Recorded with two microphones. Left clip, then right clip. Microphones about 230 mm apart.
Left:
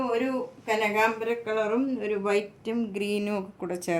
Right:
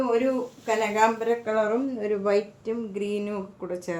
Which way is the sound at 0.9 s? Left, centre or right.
Centre.